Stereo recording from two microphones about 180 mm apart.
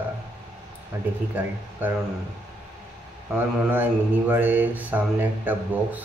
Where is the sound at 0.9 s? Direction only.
15° right (ahead or behind).